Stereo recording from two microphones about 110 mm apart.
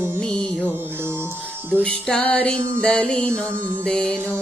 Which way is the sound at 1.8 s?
10° left (ahead or behind).